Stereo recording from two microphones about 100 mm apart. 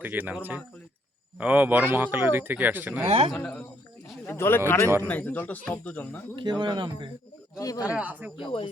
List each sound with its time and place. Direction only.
0.0 s speech: 15° right (ahead or behind)
3.1 s a man's voice: 75° right (ahead or behind)
3.3 s speech: 10° left (ahead or behind)
4.3 s speech: 20° left (ahead or behind)
6.3 s speech: 50° right (ahead or behind)
7.6 s speech: 35° left (ahead or behind)
7.9 s speech: 15° right (ahead or behind)
8.4 s speech: 60° left (ahead or behind)